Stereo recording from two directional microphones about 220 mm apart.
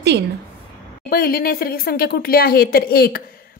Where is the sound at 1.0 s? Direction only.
45° left (ahead or behind).